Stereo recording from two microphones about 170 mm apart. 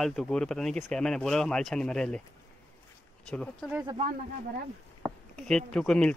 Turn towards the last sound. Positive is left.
turn(degrees=5)  # may be behind; listen again after turning